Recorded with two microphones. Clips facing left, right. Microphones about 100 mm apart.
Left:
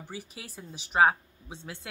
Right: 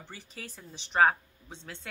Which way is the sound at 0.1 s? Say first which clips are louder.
Left 3 dB; 10° left (ahead or behind).